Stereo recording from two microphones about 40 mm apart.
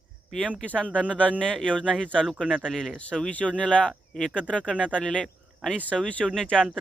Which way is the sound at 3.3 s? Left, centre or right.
Left.